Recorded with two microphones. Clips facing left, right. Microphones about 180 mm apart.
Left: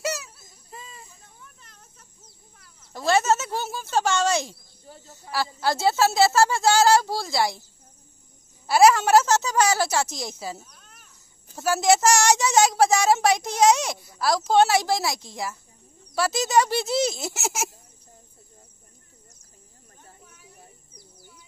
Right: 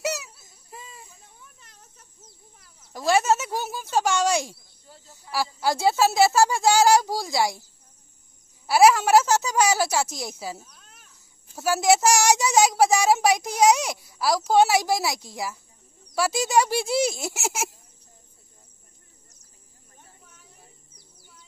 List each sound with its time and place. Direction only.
0.0 s a sound: 15° right (ahead or behind)
2.9 s speech: 10° right (ahead or behind)
4.9 s a sound: 50° left (ahead or behind)
5.3 s speech: 10° right (ahead or behind)
8.6 s speech: 5° right (ahead or behind)
17.4 s baby laughter: centre (ahead or behind)